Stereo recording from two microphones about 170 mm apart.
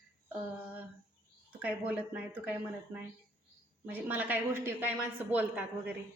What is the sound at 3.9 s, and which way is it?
Speech, 10° right (ahead or behind).